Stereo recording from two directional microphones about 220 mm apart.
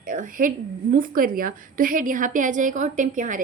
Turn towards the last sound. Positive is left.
turn(degrees=-35)  # may be behind; listen again after turning